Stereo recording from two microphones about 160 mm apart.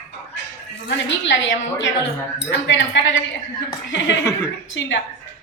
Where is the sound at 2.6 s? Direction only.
90° left.